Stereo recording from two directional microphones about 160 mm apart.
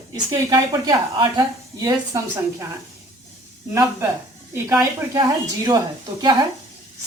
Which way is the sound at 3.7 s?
15° right (ahead or behind).